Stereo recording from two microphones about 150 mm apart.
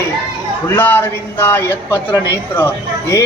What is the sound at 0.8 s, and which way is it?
A man's voice, 15° left (ahead or behind).